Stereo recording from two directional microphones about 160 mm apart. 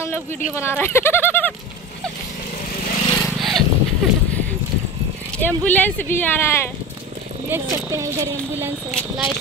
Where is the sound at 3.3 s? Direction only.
Centre (ahead or behind).